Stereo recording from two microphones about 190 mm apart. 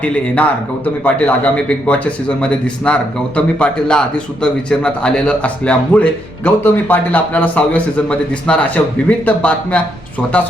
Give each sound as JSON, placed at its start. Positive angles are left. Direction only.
{"t": 0.0, "sound": "a man's voice", "side_deg": 10}